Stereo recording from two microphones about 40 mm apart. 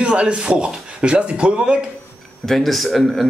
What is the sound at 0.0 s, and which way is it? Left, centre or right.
A man's voice, right.